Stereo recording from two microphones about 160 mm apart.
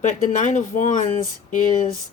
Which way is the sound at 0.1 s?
50° left (ahead or behind).